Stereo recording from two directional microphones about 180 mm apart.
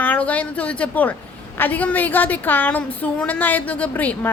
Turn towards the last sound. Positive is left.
turn(degrees=10)  # may be behind; listen again after turning